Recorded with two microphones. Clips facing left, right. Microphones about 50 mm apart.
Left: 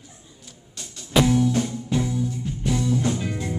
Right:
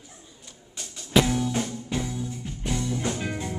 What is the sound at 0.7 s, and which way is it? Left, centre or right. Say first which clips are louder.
Music: left 1 dB; centre.